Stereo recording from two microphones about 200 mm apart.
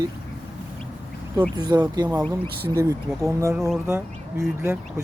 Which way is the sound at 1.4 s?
20° right (ahead or behind).